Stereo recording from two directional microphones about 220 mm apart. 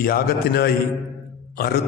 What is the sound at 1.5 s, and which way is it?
Burping, 45° left (ahead or behind).